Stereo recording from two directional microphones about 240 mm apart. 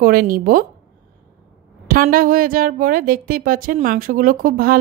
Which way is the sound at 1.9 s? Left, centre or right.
Right.